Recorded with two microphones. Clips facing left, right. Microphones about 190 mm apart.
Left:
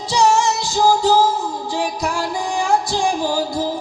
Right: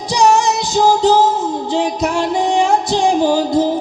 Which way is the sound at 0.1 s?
15° right (ahead or behind).